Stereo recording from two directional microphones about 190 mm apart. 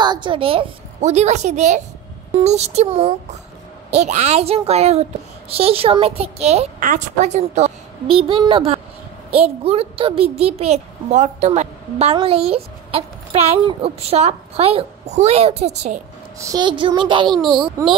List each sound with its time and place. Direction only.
0.0 s a child's voice: 25° right (ahead or behind)
16.3 s speech: 20° right (ahead or behind)